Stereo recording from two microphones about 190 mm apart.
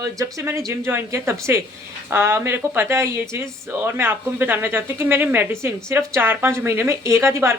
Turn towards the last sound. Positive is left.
turn(degrees=-15)  # may be behind; listen again after turning